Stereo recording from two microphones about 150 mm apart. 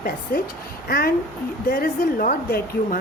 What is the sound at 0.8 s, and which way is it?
A woman's voice, 80° left.